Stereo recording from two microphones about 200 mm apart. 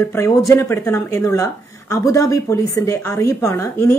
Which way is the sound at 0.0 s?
15° left (ahead or behind).